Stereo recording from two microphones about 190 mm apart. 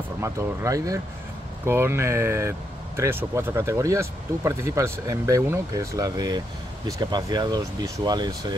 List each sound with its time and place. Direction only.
0.2 s speech: 15° right (ahead or behind)